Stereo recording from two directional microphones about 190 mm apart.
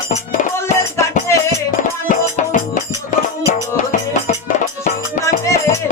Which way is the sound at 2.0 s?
40° left (ahead or behind).